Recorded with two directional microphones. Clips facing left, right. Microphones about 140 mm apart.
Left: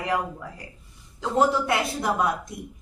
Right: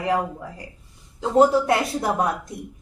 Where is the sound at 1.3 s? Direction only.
35° right (ahead or behind).